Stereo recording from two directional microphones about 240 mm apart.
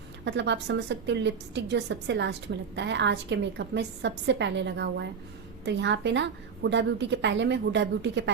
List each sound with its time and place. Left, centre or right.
0.3 s a woman's voice: right